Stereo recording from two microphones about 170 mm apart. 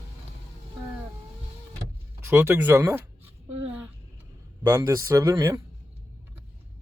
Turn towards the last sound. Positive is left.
turn(degrees=-15)  # may be behind; listen again after turning